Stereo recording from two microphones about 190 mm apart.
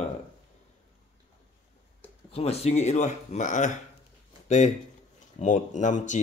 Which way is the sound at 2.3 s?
35° left (ahead or behind).